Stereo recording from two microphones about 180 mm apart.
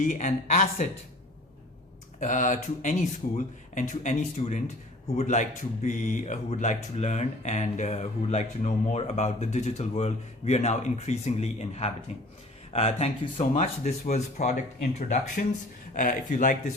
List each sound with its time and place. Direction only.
0.1 s speech: 45° left (ahead or behind)
2.2 s speech: 45° left (ahead or behind)